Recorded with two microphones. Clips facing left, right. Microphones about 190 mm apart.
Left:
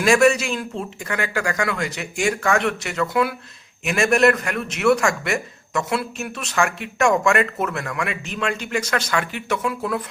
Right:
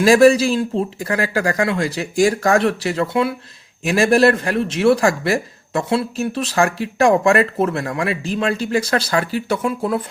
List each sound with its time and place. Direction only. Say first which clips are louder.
0.0 s a man's voice: right 5 dB; 35° right (ahead or behind)